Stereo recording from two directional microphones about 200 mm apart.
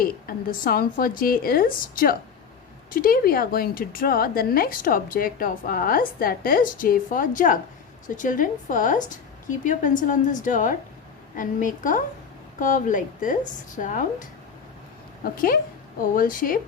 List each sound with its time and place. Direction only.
0.0 s a woman's voice: 45° left (ahead or behind)